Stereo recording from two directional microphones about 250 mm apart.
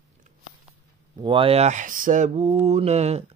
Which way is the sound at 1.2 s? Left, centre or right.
Centre.